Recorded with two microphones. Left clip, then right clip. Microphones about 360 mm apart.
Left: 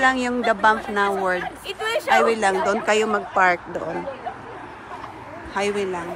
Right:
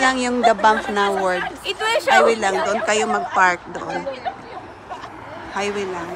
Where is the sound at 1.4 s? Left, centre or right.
Right.